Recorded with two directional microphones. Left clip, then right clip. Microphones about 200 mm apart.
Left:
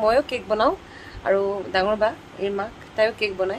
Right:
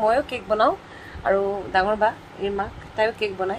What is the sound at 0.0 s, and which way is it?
A woman's voice, 25° left (ahead or behind).